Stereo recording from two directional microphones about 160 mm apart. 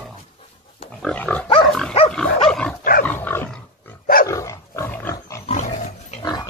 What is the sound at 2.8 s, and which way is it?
Dog, 60° left (ahead or behind).